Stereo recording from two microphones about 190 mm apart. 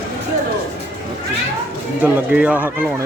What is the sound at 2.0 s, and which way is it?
Speech, 5° right (ahead or behind).